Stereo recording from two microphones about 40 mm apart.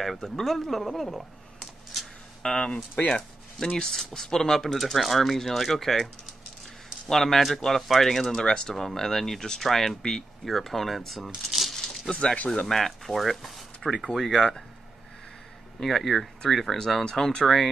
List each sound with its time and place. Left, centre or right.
0.0 s speech: centre
1.0 s a sound: centre
2.4 s speech: left; by 6.0 s centre
7.1 s speech: centre
8.3 s speech: centre
12.1 s speech: centre
13.8 s speech: centre
14.1 s speech: centre
15.8 s speech: centre
16.7 s speech: centre